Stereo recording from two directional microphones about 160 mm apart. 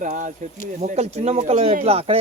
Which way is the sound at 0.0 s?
50° right (ahead or behind).